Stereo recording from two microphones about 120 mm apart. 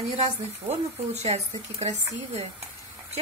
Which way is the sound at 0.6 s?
65° right (ahead or behind).